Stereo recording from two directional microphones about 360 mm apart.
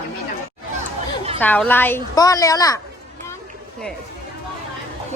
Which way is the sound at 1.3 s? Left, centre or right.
Centre.